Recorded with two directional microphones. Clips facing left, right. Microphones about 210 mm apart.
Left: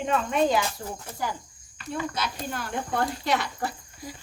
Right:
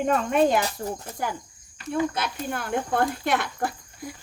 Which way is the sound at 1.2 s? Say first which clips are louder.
Right 1 dB; 55° right (ahead or behind).